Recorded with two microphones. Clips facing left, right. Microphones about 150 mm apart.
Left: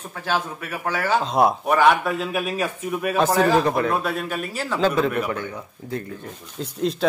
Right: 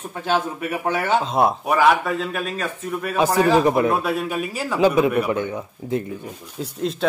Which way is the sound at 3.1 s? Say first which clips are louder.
Right 2 dB; 10° right (ahead or behind).